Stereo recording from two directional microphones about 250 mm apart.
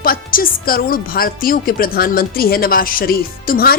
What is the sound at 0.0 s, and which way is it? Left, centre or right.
A woman's voice, left.